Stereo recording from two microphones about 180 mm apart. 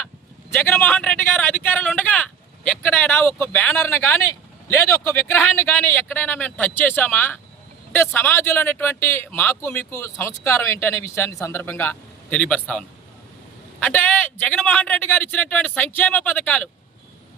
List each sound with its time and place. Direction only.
0.5 s speech: 10° left (ahead or behind)